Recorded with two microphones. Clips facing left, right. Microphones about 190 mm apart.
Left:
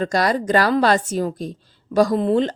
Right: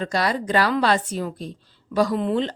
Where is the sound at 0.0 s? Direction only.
45° left (ahead or behind).